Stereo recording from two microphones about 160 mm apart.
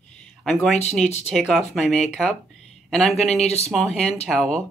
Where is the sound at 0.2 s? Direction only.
5° left (ahead or behind).